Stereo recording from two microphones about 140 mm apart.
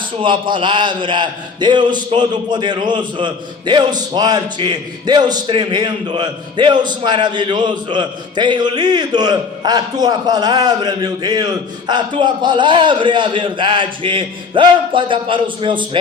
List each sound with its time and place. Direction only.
0.2 s a man's voice: 35° right (ahead or behind)